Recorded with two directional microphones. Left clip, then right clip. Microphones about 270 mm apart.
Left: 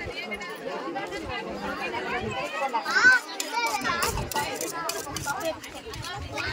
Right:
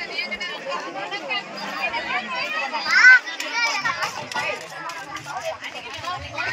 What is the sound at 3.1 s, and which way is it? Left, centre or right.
Children playing, left.